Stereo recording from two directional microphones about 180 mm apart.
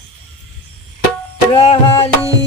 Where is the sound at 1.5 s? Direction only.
30° left (ahead or behind).